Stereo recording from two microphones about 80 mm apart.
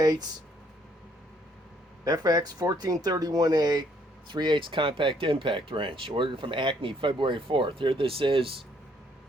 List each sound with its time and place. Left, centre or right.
0.0 s speech: right
2.0 s speech: right
4.3 s speech: right